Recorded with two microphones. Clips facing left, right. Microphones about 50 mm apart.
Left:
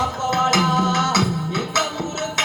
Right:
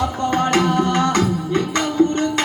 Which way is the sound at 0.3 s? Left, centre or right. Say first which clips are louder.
Right 1 dB; right.